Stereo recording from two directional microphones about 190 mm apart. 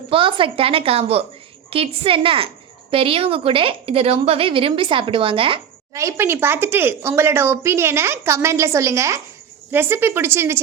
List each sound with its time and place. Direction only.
0.1 s a woman's voice: 25° right (ahead or behind)
5.9 s speech: 15° right (ahead or behind)